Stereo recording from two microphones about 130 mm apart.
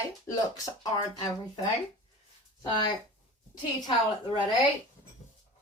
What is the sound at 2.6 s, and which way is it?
Speech, 35° left (ahead or behind).